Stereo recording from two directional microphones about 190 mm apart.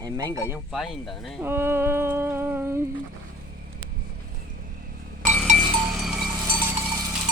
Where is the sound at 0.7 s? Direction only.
Centre (ahead or behind).